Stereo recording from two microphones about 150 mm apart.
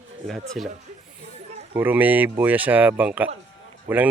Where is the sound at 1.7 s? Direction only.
10° right (ahead or behind).